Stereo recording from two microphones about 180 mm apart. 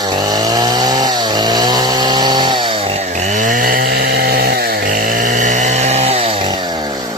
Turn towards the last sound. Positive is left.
turn(degrees=-20)  # may be behind; listen again after turning